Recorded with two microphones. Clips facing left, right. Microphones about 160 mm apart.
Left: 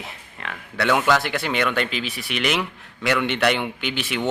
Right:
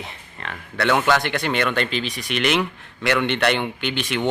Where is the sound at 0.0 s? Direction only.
5° left (ahead or behind).